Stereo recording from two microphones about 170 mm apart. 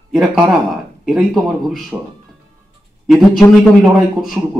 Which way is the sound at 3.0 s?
Centre (ahead or behind).